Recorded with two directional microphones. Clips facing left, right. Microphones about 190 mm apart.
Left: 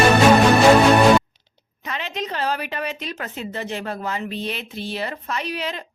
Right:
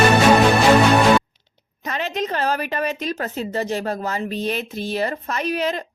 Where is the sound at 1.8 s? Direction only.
45° right (ahead or behind).